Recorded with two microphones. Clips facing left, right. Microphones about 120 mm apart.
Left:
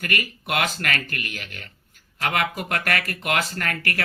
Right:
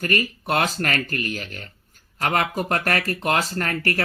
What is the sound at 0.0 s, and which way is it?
Speech, 35° right (ahead or behind).